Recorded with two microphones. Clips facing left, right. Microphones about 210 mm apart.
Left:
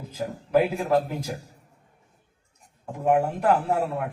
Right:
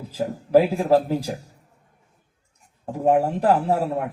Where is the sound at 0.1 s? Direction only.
35° right (ahead or behind).